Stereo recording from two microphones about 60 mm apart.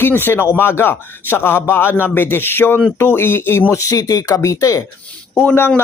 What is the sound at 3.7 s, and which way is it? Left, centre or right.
Speech, left.